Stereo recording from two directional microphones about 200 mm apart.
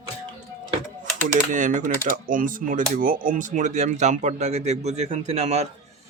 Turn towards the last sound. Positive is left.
turn(degrees=-30)  # may be behind; listen again after turning